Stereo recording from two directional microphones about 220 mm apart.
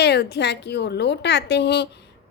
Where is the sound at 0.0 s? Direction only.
50° left (ahead or behind).